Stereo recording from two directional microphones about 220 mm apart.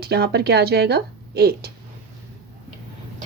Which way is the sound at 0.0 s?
45° right (ahead or behind).